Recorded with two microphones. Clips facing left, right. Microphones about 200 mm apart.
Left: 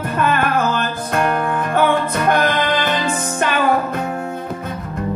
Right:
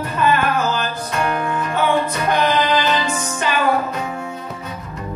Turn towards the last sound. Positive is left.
turn(degrees=55)  # may be behind; listen again after turning